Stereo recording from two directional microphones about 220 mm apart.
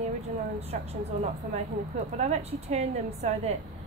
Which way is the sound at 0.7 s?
35° right (ahead or behind).